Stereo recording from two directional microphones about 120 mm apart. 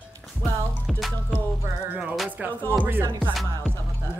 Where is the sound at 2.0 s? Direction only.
10° right (ahead or behind).